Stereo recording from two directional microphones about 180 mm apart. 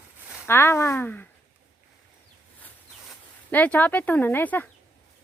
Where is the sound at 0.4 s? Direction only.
15° left (ahead or behind).